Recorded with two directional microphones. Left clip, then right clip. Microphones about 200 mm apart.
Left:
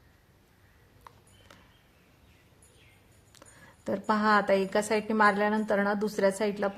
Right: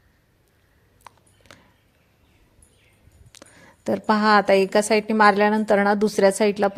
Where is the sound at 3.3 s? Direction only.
25° right (ahead or behind).